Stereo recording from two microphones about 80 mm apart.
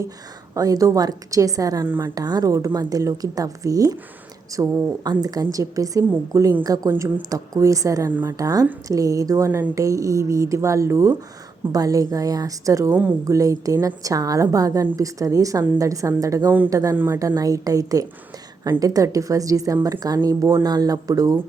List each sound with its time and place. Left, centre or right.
0.5 s a woman's voice: right
1.9 s speech: right
2.1 s a woman's voice: right
2.5 s a woman's voice: right
11.7 s a woman's voice: right
12.9 s speech: right
13.2 s a woman's voice: right
16.9 s speech: right
17.2 s a woman's voice: right